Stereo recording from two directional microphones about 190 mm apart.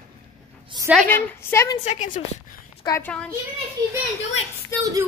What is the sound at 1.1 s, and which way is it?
Speech, 10° left (ahead or behind).